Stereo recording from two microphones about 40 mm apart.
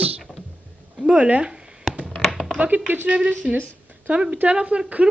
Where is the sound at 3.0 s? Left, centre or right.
Right.